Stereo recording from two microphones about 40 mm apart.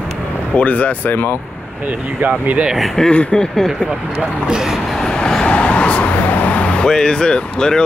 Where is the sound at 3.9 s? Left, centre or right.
Right.